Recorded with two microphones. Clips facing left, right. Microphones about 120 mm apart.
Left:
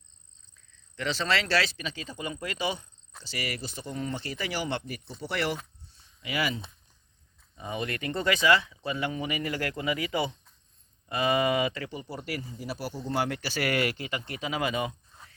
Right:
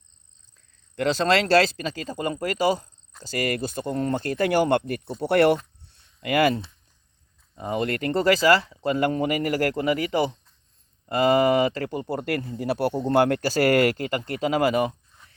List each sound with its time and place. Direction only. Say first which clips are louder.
0.9 s speech: right 8 dB; 45° right (ahead or behind)
5.9 s a sound: right 10 dB; 55° right (ahead or behind)
7.8 s speech: right 8 dB; 45° right (ahead or behind)